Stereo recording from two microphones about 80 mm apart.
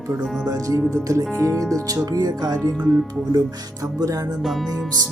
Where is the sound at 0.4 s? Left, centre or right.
Right.